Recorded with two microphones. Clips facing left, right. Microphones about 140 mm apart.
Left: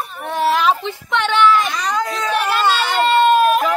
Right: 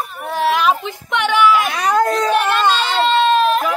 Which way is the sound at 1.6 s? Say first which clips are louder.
Right 5 dB; 60° right (ahead or behind).